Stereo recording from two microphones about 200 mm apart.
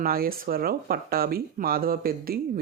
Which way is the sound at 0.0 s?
50° right (ahead or behind).